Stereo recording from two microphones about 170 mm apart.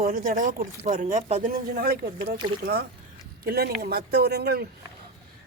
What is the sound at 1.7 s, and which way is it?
Speech, 60° right (ahead or behind).